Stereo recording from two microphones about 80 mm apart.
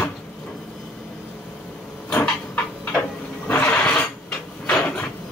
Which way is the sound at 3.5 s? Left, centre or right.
Centre.